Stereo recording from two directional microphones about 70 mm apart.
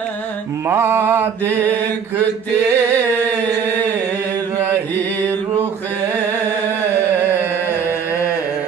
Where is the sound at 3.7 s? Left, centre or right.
Left.